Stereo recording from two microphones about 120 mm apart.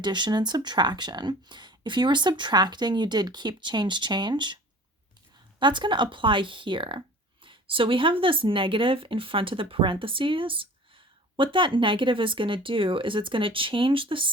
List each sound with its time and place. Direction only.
0.0 s speech: 40° right (ahead or behind)
5.5 s speech: 40° right (ahead or behind)